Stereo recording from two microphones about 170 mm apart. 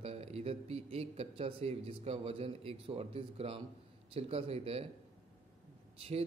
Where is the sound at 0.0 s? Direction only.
40° right (ahead or behind).